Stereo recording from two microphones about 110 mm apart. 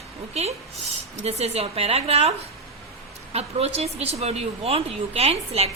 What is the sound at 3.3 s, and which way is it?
Speech, 70° right (ahead or behind).